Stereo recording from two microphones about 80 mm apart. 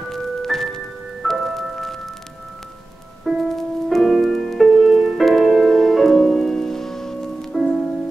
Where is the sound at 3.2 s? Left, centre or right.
Centre.